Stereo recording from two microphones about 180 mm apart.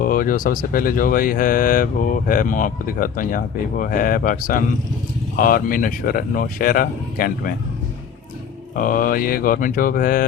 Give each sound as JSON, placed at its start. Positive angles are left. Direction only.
{"t": 0.0, "sound": "speech", "side_deg": 50}
{"t": 8.7, "sound": "speech", "side_deg": 50}